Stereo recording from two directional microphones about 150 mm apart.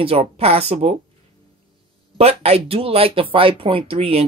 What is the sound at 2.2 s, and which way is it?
Speech, 40° right (ahead or behind).